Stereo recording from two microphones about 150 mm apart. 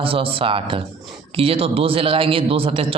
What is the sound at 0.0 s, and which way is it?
Speech, 40° right (ahead or behind).